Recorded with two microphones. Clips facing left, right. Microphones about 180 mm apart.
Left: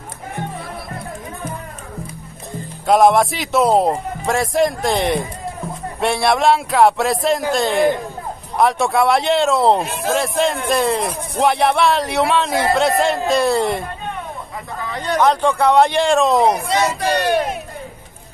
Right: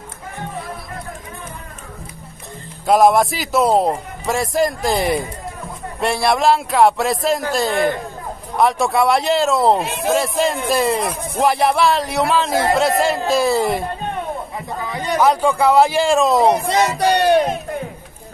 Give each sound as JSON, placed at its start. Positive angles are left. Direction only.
{"t": 2.9, "sound": "a man's voice", "side_deg": 0}
{"t": 14.9, "sound": "speech", "side_deg": -5}